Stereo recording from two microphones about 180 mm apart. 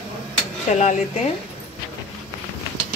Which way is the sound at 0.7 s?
45° left (ahead or behind).